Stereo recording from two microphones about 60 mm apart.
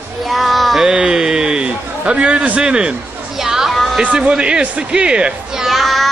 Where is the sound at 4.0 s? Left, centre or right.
Centre.